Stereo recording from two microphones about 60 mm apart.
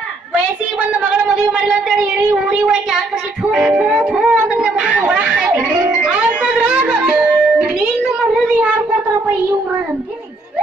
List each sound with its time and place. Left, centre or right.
0.3 s a woman's voice: centre
3.5 s music: centre
8.5 s cat: right